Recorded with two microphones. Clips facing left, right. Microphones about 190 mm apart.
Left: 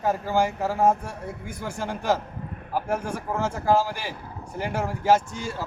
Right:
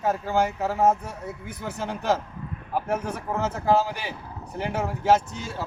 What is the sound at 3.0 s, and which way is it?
A man's voice, 10° left (ahead or behind).